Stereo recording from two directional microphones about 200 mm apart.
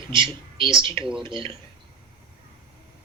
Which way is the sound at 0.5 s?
25° right (ahead or behind).